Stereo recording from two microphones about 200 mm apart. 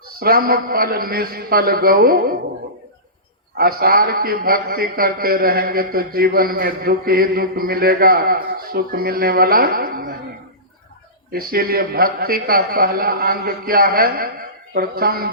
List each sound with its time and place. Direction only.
0.2 s a man's voice: 50° right (ahead or behind)
3.6 s a man's voice: 50° right (ahead or behind)
11.3 s a man's voice: 45° right (ahead or behind)